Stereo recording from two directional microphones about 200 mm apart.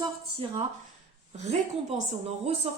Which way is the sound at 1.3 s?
35° right (ahead or behind).